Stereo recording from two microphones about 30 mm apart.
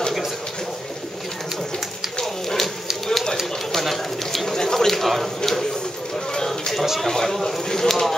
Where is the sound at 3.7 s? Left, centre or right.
Centre.